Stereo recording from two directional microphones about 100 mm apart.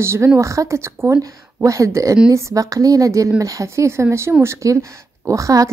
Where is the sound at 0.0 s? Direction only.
25° right (ahead or behind).